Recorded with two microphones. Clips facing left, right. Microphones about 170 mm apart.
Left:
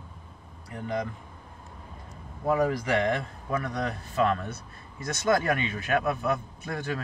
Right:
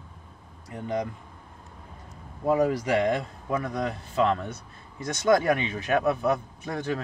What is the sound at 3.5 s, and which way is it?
A man's voice, 20° right (ahead or behind).